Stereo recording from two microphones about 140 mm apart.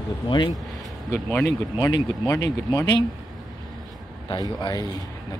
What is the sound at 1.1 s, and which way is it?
Speech, 10° left (ahead or behind).